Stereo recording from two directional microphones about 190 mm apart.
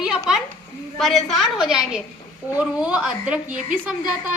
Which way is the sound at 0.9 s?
Centre (ahead or behind).